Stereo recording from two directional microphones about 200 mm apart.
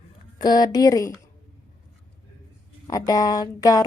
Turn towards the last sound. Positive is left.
turn(degrees=20)  # may be behind; listen again after turning